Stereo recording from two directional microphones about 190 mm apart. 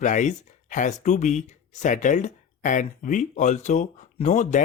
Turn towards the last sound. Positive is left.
turn(degrees=40)  # may be behind; listen again after turning